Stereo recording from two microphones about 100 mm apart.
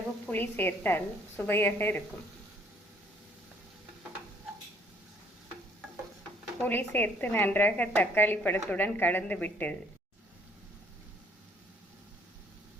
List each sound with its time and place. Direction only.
0.3 s a woman's voice: 20° left (ahead or behind)
6.6 s a woman's voice: 20° left (ahead or behind)